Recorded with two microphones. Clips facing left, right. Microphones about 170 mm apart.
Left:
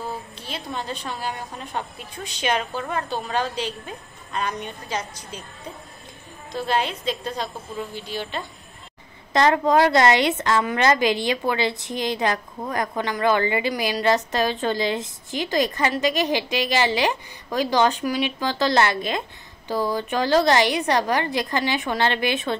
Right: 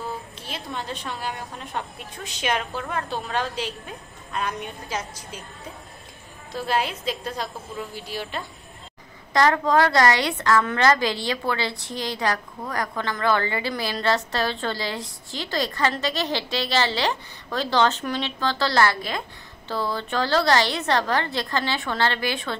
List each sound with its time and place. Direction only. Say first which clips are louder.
0.4 s a woman's voice: left 2 dB; centre (ahead or behind)
6.5 s a woman's voice: left 1 dB; 5° right (ahead or behind)
9.3 s a woman's voice: left 2 dB; 20° left (ahead or behind)